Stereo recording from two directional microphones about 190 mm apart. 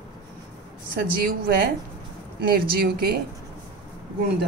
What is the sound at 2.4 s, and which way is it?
Speech, 55° right (ahead or behind).